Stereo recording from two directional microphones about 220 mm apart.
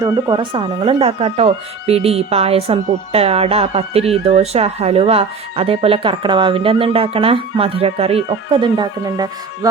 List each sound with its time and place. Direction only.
0.0 s speech: 15° right (ahead or behind)